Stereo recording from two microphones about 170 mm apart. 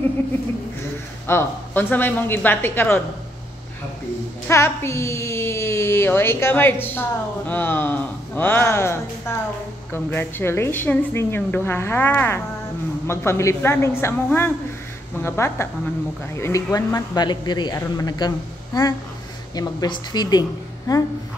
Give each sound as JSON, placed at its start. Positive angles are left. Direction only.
{"t": 1.2, "sound": "a woman's voice", "side_deg": 10}
{"t": 4.5, "sound": "a woman's voice", "side_deg": 15}